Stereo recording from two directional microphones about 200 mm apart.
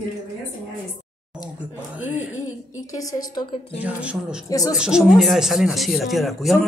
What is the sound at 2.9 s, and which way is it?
Speech, 15° left (ahead or behind).